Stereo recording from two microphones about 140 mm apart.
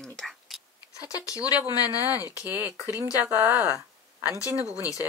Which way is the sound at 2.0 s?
15° right (ahead or behind).